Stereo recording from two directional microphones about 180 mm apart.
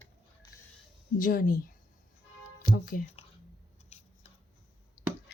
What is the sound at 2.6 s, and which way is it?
Speech, 50° left (ahead or behind).